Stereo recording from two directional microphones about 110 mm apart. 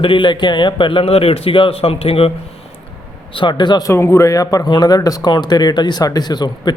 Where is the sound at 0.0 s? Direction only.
50° left (ahead or behind).